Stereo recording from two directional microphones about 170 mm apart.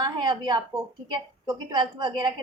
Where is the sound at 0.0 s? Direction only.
25° right (ahead or behind).